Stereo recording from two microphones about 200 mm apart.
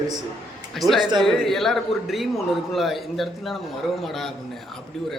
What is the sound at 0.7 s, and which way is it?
A man's voice, centre (ahead or behind).